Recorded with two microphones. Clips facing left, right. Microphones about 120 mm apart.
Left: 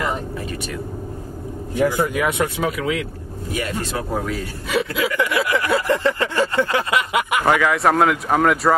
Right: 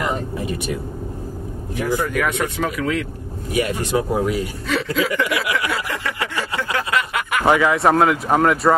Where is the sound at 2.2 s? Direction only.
5° left (ahead or behind).